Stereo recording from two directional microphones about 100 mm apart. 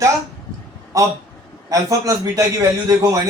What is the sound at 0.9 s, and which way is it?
Speech, 35° right (ahead or behind).